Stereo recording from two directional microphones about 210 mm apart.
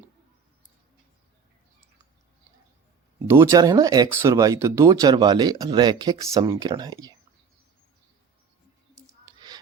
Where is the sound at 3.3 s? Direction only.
15° right (ahead or behind).